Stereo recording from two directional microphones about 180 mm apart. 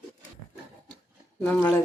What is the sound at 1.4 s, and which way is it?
Speech, 10° left (ahead or behind).